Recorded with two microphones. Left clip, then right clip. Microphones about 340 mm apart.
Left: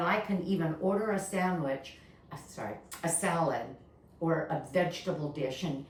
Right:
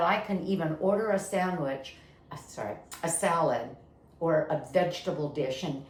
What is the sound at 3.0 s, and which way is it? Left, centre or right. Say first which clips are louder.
A woman's voice: right 4 dB; centre.